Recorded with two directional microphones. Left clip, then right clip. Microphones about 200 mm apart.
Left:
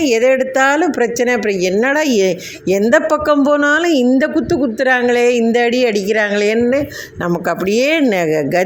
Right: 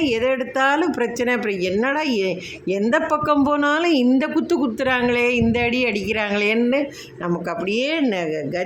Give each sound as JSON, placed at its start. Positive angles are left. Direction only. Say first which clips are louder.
{"t": 0.0, "sound": "a woman's voice", "louder": "left 8 dB", "side_deg": 20}